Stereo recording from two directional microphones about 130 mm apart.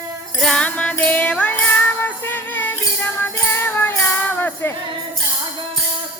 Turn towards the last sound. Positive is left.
turn(degrees=15)  # may be behind; listen again after turning